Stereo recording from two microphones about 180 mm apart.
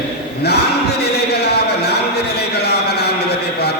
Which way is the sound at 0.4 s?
65° left (ahead or behind).